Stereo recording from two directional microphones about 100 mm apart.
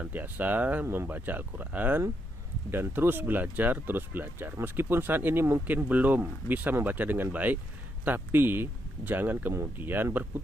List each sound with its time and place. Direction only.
0.0 s speech: 15° right (ahead or behind)